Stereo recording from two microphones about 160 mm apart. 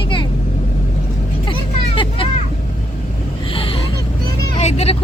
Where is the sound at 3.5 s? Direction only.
35° left (ahead or behind).